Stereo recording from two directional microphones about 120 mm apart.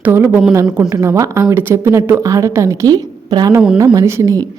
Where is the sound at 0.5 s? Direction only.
30° right (ahead or behind).